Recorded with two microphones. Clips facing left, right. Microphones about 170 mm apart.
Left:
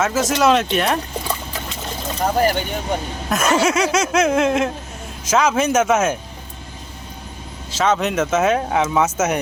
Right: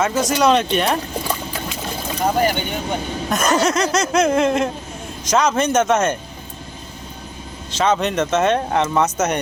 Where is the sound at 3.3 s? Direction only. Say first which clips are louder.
Left 1 dB; 5° left (ahead or behind).